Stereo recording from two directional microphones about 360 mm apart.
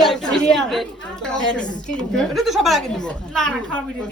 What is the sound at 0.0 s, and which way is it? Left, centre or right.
A woman's voice, centre.